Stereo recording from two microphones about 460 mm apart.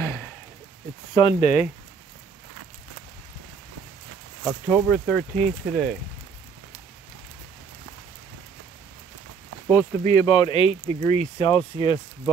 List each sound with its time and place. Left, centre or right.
0.0 s a sound: centre
1.1 s speech: centre
4.5 s speech: centre
9.8 s speech: centre